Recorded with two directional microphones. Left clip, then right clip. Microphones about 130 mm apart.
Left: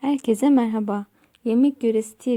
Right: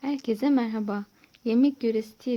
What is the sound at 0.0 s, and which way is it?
A woman's voice, 50° left (ahead or behind).